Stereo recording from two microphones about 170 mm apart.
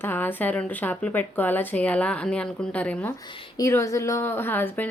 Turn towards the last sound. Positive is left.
turn(degrees=10)  # may be behind; listen again after turning